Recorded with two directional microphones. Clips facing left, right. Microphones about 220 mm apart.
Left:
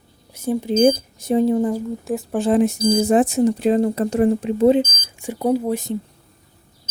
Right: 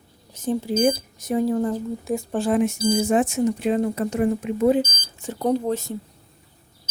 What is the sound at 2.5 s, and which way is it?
Speech, 35° left (ahead or behind).